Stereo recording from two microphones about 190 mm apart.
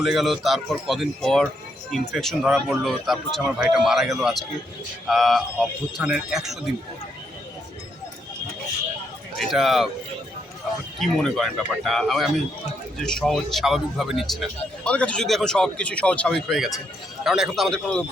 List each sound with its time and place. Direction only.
0.0 s speech: centre (ahead or behind)
9.4 s speech: centre (ahead or behind)
11.0 s speech: centre (ahead or behind)